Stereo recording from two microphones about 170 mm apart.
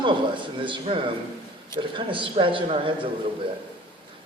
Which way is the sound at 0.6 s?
30° right (ahead or behind).